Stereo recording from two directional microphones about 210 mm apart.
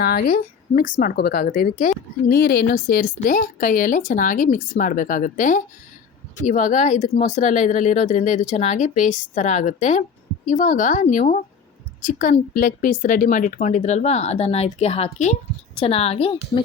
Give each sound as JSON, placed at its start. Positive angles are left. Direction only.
{"t": 0.0, "sound": "a woman's voice", "side_deg": 45}